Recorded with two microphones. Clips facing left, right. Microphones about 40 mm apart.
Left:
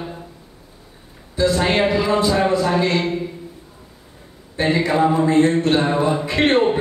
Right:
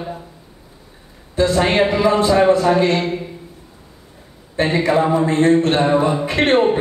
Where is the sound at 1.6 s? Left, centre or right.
Right.